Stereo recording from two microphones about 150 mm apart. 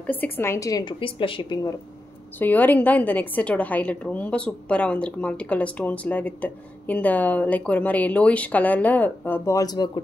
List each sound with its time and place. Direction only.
0.0 s a woman's voice: 10° left (ahead or behind)
2.3 s a woman's voice: 10° left (ahead or behind); by 10.0 s 25° left (ahead or behind)